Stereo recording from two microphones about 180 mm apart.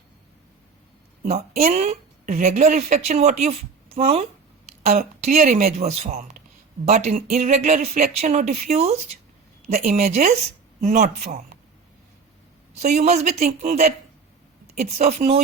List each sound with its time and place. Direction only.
1.2 s speech: 45° right (ahead or behind)
12.7 s speech: 40° right (ahead or behind)